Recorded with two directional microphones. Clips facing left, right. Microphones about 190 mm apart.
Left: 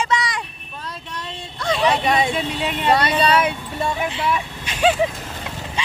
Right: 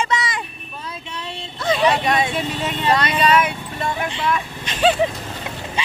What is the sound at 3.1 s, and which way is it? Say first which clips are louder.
Speech: even; 30° left (ahead or behind).